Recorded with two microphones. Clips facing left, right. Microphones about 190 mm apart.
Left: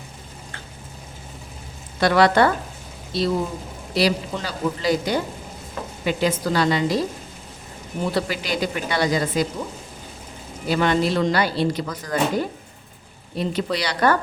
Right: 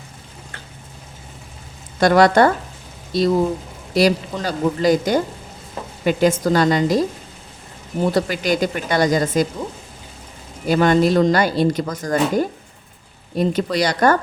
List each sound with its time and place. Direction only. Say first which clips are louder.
2.0 s a woman's voice: right 4 dB; 45° right (ahead or behind)
8.1 s a woman's voice: right 4 dB; 45° right (ahead or behind)
10.7 s a woman's voice: right 5 dB; 45° right (ahead or behind)